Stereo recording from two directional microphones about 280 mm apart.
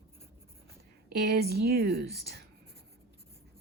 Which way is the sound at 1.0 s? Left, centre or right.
Right.